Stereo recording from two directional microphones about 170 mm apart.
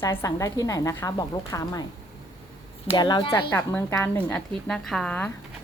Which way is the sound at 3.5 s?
15° left (ahead or behind).